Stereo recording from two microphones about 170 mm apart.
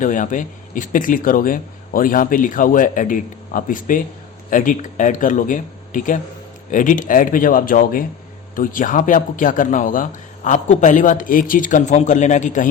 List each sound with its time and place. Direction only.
0.0 s a man's voice: 50° left (ahead or behind)